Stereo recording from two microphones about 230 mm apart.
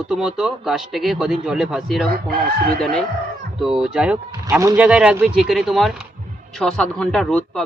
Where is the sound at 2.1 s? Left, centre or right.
Right.